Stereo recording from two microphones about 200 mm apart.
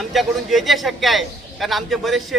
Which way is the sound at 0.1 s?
Centre (ahead or behind).